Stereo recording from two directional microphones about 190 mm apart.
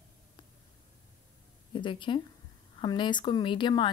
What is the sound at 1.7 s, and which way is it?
Speech, 25° left (ahead or behind).